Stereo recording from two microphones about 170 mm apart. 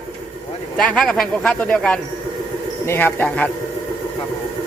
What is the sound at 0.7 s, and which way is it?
Speech, 5° left (ahead or behind).